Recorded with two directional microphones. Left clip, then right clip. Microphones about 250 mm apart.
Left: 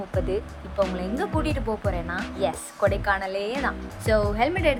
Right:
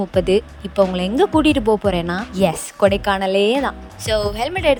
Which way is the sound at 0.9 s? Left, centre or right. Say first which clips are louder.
Right 11 dB; right.